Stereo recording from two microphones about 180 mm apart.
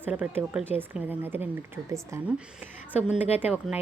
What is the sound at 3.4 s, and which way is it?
Speech, 5° right (ahead or behind).